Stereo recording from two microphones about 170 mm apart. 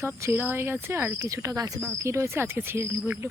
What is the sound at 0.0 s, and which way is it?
Speech, 15° right (ahead or behind).